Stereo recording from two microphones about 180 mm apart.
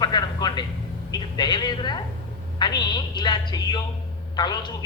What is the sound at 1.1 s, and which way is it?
A woman's voice, 25° left (ahead or behind).